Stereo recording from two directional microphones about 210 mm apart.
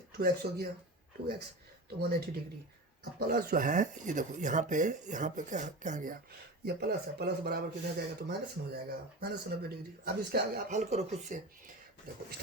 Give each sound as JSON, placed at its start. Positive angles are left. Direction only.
{"t": 0.2, "sound": "speech", "side_deg": -45}
{"t": 2.0, "sound": "speech", "side_deg": -50}
{"t": 6.7, "sound": "speech", "side_deg": -50}
{"t": 10.7, "sound": "speech", "side_deg": -35}